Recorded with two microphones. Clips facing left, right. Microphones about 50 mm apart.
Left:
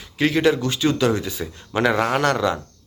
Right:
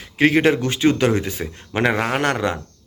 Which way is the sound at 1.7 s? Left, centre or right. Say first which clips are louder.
Left 1 dB; right.